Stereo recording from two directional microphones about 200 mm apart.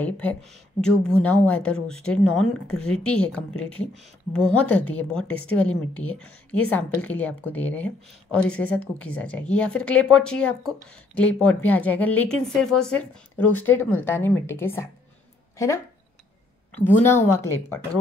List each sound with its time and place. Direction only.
0.0 s a woman's voice: 10° left (ahead or behind)
16.8 s a woman's voice: 10° left (ahead or behind)